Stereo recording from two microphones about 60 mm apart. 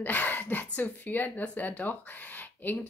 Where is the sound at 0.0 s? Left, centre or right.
Left.